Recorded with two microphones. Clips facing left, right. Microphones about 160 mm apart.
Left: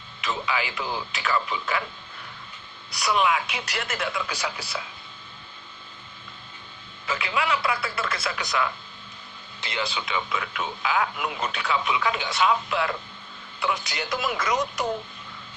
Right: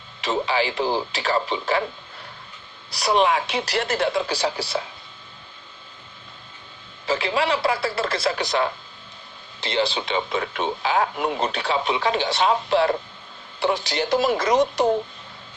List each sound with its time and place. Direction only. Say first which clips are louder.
0.2 s a man's voice: right 6 dB; 35° right (ahead or behind)
2.9 s a man's voice: right 4 dB; 35° right (ahead or behind)
7.0 s a man's voice: right 5 dB; 35° right (ahead or behind)